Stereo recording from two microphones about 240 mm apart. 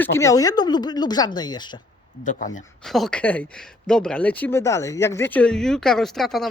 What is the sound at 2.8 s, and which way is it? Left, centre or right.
Speech, centre.